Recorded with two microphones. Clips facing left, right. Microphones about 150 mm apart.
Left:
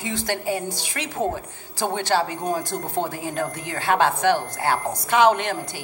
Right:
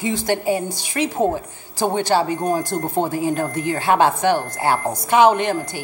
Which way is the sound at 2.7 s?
50° right (ahead or behind).